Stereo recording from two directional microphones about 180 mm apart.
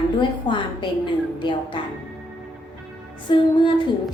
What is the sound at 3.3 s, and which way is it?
Speech, 25° left (ahead or behind).